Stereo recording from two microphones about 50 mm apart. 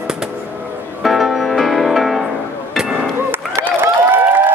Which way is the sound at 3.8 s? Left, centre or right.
Right.